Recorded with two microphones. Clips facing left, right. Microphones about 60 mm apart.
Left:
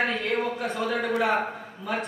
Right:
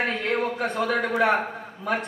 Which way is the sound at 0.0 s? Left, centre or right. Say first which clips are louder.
Right 1 dB; right.